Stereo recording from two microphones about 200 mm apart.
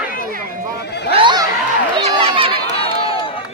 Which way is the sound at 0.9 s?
55° left (ahead or behind).